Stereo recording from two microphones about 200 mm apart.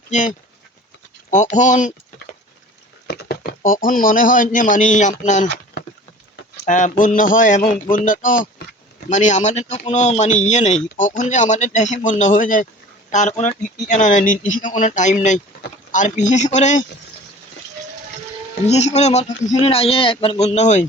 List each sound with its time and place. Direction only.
0.1 s a man's voice: 40° left (ahead or behind)
3.1 s speech: 50° left (ahead or behind); by 5.5 s 35° left (ahead or behind)
6.7 s a man's voice: 40° left (ahead or behind)
18.7 s a man's voice: 35° left (ahead or behind)